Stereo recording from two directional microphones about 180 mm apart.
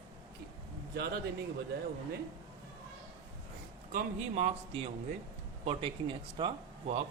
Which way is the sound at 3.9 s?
45° right (ahead or behind).